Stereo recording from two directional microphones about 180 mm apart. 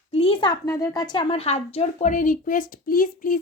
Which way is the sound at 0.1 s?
30° left (ahead or behind).